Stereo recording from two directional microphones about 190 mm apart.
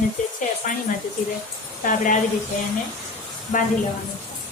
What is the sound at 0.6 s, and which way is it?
Speech, 40° left (ahead or behind).